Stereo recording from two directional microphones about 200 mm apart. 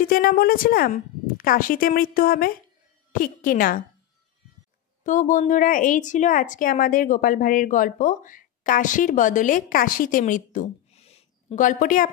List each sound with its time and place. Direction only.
0.0 s speech: 45° left (ahead or behind)
5.0 s a woman's voice: 40° left (ahead or behind)